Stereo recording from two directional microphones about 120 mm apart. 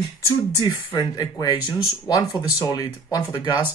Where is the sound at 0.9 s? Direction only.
35° left (ahead or behind).